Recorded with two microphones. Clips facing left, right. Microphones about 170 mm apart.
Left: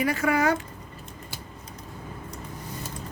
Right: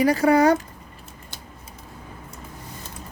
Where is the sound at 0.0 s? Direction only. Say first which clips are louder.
Right 7 dB; 35° right (ahead or behind).